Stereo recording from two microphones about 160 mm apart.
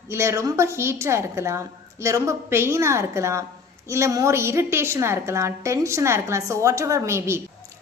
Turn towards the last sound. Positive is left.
turn(degrees=-15)  # may be behind; listen again after turning